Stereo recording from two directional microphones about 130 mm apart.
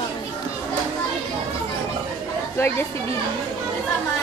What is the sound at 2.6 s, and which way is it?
Speech, 20° left (ahead or behind).